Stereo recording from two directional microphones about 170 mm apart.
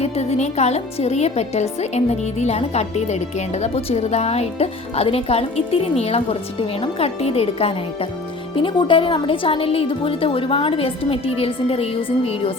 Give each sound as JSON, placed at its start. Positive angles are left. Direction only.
{"t": 0.0, "sound": "a woman's voice", "side_deg": 40}